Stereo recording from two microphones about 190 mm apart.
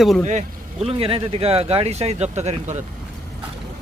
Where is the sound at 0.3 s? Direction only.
35° right (ahead or behind).